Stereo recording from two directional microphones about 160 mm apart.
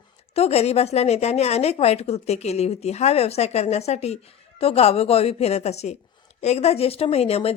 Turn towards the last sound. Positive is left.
turn(degrees=40)  # may be behind; listen again after turning